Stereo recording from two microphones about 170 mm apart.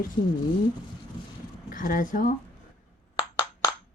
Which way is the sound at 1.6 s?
55° left (ahead or behind).